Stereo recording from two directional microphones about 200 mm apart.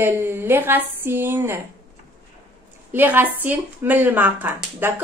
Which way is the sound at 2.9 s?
10° right (ahead or behind).